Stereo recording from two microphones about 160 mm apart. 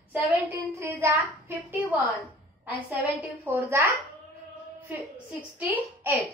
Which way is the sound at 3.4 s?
15° right (ahead or behind).